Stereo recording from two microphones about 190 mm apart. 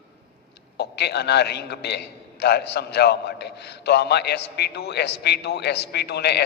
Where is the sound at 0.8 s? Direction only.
60° left (ahead or behind).